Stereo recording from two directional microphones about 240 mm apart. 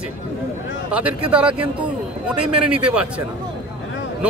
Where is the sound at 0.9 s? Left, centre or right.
Centre.